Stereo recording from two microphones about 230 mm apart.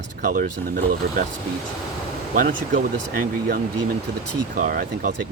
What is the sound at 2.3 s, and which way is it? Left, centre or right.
Speech, right.